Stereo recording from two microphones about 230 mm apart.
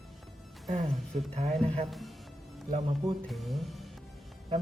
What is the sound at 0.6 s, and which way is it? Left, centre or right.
Speech, right.